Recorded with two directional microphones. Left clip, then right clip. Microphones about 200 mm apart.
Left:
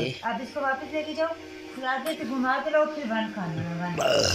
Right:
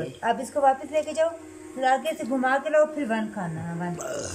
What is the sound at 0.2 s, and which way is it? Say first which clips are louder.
Speech: right 7 dB; 45° right (ahead or behind).